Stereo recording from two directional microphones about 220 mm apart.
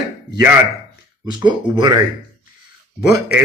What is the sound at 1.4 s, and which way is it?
Speech, 20° right (ahead or behind).